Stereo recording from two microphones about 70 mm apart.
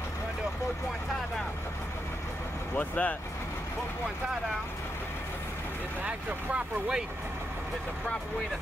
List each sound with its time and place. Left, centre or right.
2.7 s speech: left
6.0 s speech: centre